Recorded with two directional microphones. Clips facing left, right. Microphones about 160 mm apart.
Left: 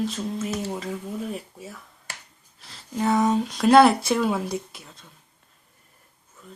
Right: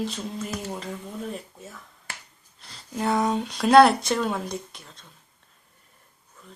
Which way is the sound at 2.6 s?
Centre (ahead or behind).